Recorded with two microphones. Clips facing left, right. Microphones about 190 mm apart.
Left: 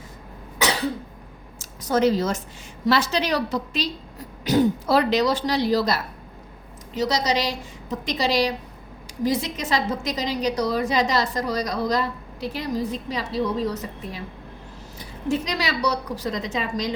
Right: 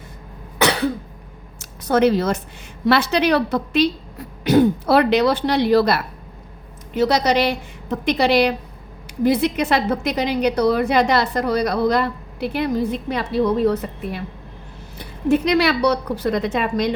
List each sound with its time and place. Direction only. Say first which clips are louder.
0.6 s cough: right 5 dB; 60° right (ahead or behind)
1.5 s a sound: right 4 dB; 60° right (ahead or behind)
2.8 s a woman's voice: right 5 dB; 60° right (ahead or behind)